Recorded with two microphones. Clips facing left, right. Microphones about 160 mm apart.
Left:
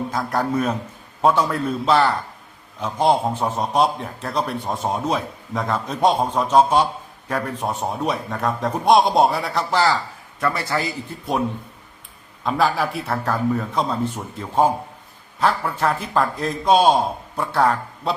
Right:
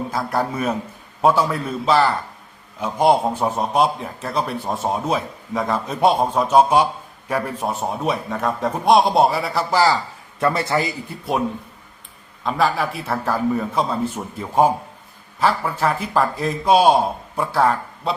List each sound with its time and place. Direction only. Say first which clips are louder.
0.1 s a man's voice: left 1 dB; 5° right (ahead or behind)
2.8 s a man's voice: right 2 dB; 10° right (ahead or behind)
10.4 s a man's voice: right 3 dB; 25° right (ahead or behind)
12.4 s a man's voice: even; centre (ahead or behind)